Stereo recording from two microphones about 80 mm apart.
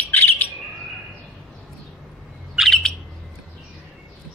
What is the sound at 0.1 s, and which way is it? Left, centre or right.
Bird, left.